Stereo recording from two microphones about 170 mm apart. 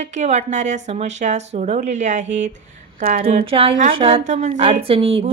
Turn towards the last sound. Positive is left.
turn(degrees=-35)  # may be behind; listen again after turning